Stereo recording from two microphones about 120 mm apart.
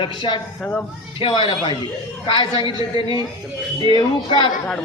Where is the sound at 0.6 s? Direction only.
10° left (ahead or behind).